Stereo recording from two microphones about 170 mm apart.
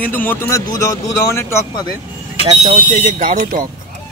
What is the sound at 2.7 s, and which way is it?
Speech, 45° right (ahead or behind).